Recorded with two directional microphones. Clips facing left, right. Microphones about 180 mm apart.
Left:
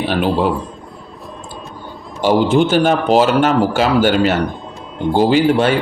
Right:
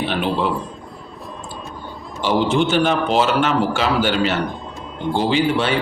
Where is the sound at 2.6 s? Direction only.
45° left (ahead or behind).